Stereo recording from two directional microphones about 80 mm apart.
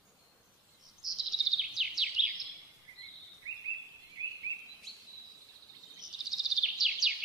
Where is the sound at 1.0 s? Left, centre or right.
Centre.